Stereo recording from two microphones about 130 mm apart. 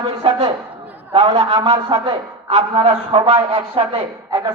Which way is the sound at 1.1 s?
50° right (ahead or behind).